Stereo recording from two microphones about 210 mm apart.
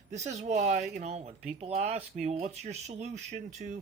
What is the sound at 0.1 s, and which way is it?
Speech, 35° right (ahead or behind).